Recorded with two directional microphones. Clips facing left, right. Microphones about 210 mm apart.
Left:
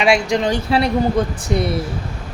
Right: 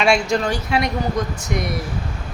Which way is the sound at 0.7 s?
30° left (ahead or behind).